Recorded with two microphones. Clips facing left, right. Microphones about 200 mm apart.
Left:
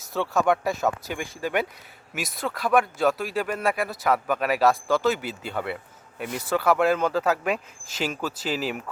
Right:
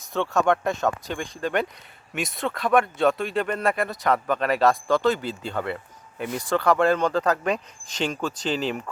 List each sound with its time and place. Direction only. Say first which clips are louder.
0.1 s speech: right 1 dB; 5° left (ahead or behind)